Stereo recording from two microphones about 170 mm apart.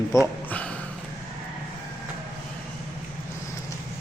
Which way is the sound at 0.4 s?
10° left (ahead or behind).